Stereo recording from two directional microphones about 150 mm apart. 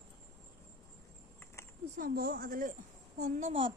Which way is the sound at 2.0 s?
90° right.